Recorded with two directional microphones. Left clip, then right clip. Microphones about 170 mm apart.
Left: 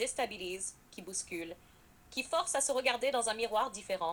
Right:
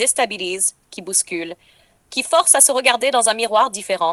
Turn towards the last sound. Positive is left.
turn(degrees=-50)  # may be behind; listen again after turning